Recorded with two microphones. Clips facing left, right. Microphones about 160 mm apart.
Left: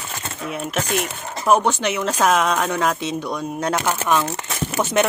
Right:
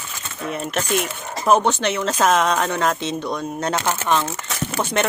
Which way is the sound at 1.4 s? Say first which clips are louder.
Even; centre (ahead or behind).